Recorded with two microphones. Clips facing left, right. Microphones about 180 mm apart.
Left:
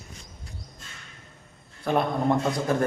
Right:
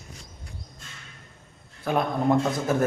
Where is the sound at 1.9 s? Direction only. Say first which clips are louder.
Even; centre (ahead or behind).